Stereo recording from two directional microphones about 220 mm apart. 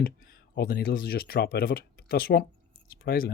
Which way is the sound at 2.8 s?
45° left (ahead or behind).